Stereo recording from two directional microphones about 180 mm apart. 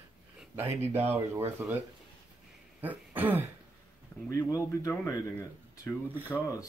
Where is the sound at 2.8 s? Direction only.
10° right (ahead or behind).